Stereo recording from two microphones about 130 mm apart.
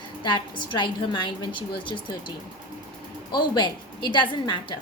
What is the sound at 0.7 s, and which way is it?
Speech, 35° left (ahead or behind).